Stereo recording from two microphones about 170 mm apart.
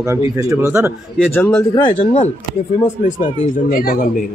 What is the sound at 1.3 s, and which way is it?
Speech, 15° left (ahead or behind).